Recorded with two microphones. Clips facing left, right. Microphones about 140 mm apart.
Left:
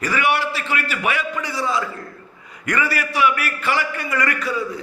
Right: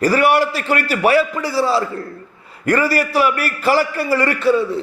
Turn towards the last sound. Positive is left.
turn(degrees=-25)  # may be behind; listen again after turning